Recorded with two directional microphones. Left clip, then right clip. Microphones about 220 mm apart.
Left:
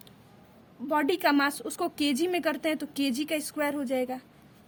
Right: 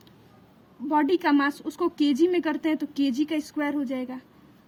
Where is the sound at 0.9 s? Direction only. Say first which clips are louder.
Right 3 dB; 25° left (ahead or behind).